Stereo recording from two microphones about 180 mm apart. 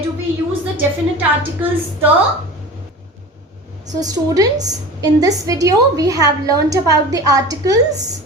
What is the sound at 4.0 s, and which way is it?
A woman's voice, 20° right (ahead or behind).